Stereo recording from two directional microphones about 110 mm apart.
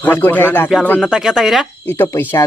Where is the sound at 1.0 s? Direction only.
5° right (ahead or behind).